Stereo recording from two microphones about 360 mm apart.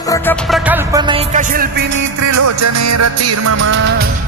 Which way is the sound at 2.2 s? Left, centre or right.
Right.